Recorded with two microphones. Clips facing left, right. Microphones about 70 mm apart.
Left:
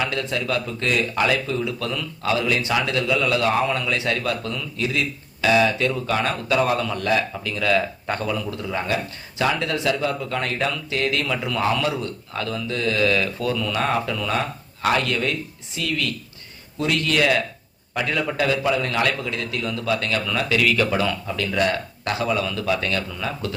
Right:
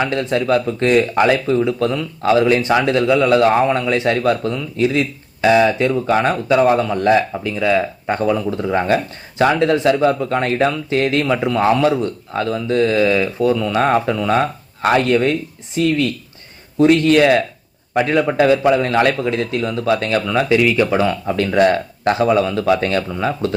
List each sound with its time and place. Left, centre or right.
0.0 s speech: right
7.5 s speech: centre
20.5 s speech: centre; by 23.6 s right